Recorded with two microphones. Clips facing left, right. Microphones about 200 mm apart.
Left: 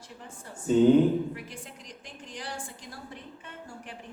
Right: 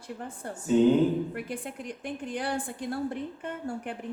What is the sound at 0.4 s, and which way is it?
A woman's voice, 60° right (ahead or behind).